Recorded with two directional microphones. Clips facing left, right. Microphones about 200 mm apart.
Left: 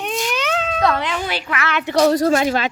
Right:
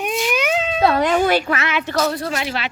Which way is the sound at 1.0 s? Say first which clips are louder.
Right 8 dB; 45° right (ahead or behind).